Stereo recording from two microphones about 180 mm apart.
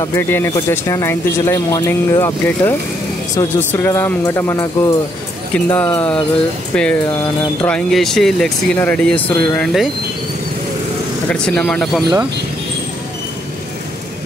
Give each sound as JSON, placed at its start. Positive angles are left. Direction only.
{"t": 0.0, "sound": "speech", "side_deg": 15}
{"t": 11.4, "sound": "speech", "side_deg": 5}